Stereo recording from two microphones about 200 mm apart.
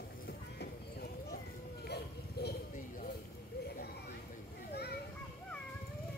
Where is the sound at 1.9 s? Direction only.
55° left (ahead or behind).